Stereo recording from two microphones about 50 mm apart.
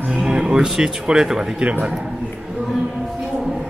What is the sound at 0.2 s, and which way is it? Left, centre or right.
Speech, centre.